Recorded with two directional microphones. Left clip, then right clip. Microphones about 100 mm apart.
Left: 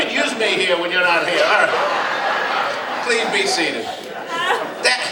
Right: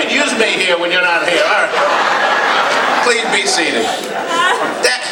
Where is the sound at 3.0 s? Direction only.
45° right (ahead or behind).